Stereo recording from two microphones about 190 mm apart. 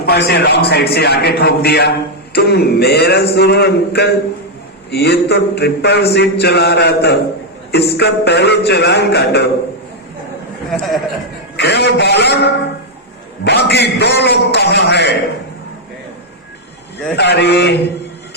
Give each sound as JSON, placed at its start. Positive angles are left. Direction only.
{"t": 0.0, "sound": "a man's voice", "side_deg": 60}
{"t": 10.7, "sound": "a man's voice", "side_deg": 0}
{"t": 11.5, "sound": "a man's voice", "side_deg": 60}
{"t": 17.2, "sound": "a man's voice", "side_deg": 60}